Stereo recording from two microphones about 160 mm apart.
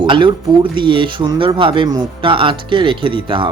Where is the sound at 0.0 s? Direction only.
30° right (ahead or behind).